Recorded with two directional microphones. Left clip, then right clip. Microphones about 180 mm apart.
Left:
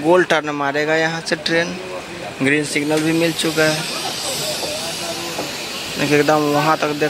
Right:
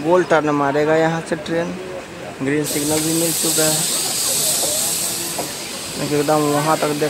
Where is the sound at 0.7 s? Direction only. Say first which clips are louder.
Right 2 dB; centre (ahead or behind).